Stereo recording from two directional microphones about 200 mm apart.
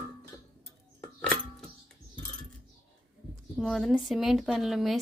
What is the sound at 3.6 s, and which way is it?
Speech, centre (ahead or behind).